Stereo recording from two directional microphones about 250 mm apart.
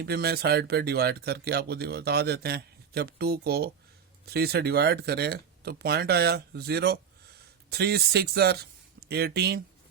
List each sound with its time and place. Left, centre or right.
0.0 s speech: right